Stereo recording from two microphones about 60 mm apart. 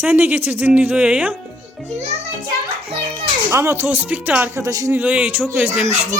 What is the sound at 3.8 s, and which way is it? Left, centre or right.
Music, right.